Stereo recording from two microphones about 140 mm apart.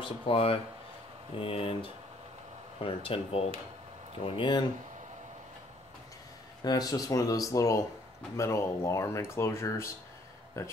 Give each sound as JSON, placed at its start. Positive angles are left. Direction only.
{"t": 0.0, "sound": "speech", "side_deg": 40}
{"t": 6.6, "sound": "speech", "side_deg": 30}